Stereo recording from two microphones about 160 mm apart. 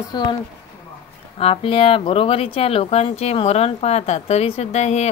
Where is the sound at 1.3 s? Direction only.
35° left (ahead or behind).